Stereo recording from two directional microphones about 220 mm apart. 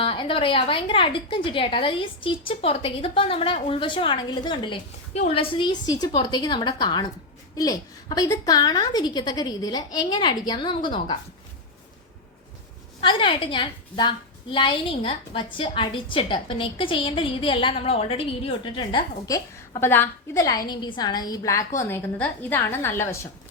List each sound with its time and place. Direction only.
0.0 s a woman's voice: 25° left (ahead or behind)
13.0 s a woman's voice: 25° left (ahead or behind)